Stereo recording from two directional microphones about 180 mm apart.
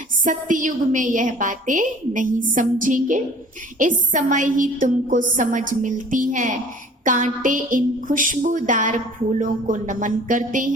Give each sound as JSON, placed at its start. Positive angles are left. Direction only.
{"t": 0.3, "sound": "a woman's voice", "side_deg": -45}